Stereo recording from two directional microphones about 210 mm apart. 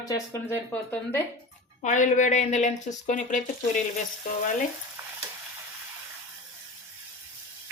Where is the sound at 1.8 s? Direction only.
35° left (ahead or behind).